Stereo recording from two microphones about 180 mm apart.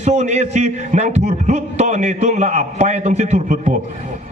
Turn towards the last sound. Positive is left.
turn(degrees=-40)  # may be behind; listen again after turning